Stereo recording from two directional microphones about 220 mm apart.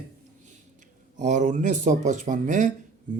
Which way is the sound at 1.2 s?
35° right (ahead or behind).